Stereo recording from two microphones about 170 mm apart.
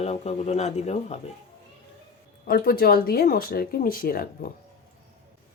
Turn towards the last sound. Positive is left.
turn(degrees=60)  # may be behind; listen again after turning